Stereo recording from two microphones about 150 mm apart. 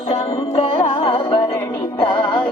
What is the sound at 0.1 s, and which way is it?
Music, 40° left (ahead or behind).